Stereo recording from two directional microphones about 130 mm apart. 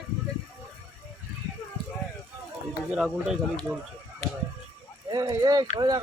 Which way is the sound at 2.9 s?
5° right (ahead or behind).